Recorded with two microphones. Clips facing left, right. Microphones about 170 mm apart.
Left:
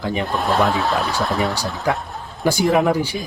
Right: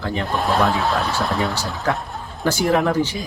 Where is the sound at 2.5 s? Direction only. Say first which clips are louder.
Left 2 dB; 10° left (ahead or behind).